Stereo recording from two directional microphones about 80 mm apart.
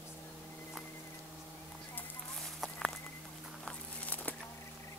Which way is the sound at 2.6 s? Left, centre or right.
Centre.